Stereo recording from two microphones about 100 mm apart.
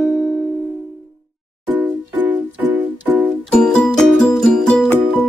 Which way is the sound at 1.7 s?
15° right (ahead or behind).